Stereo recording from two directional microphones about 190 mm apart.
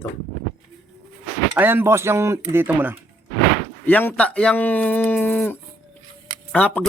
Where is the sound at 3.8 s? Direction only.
10° left (ahead or behind).